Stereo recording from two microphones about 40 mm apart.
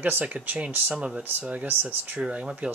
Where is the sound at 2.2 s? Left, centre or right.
Right.